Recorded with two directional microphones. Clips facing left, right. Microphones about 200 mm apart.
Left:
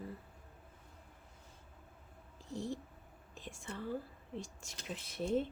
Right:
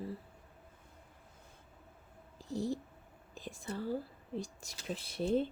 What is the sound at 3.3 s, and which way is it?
Whispering, 35° right (ahead or behind).